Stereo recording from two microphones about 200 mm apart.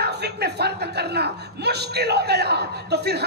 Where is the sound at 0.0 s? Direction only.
55° right (ahead or behind).